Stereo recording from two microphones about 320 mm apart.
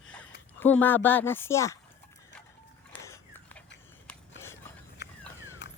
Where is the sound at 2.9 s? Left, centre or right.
Centre.